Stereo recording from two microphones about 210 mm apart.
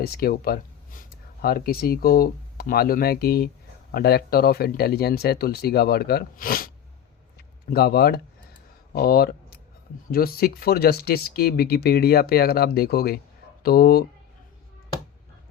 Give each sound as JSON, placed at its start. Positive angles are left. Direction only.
{"t": 0.0, "sound": "speech", "side_deg": 45}
{"t": 7.7, "sound": "speech", "side_deg": 50}